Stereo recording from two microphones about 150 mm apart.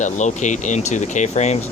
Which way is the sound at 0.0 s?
55° left (ahead or behind).